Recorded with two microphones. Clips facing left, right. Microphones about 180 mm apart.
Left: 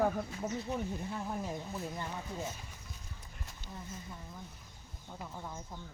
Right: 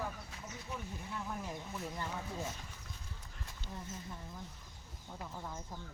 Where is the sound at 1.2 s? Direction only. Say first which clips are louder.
Left 4 dB; 25° left (ahead or behind).